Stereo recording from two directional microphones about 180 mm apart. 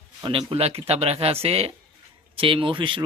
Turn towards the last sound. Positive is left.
turn(degrees=-25)  # may be behind; listen again after turning